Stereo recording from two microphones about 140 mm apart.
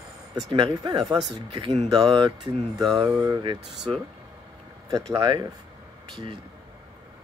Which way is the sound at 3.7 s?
Centre (ahead or behind).